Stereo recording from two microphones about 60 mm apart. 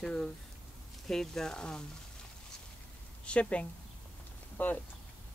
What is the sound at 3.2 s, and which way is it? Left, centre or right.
A woman's voice, centre.